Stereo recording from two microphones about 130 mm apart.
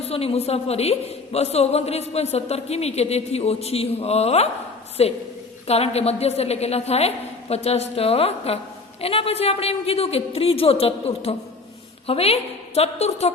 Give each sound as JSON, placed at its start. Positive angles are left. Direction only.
{"t": 0.0, "sound": "a man's voice", "side_deg": 50}